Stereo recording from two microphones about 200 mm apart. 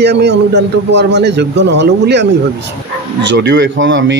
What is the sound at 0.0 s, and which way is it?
Speech, 55° right (ahead or behind).